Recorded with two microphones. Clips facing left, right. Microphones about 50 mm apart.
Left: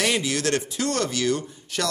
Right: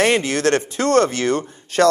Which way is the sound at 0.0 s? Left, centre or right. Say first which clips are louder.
Right 7 dB; right.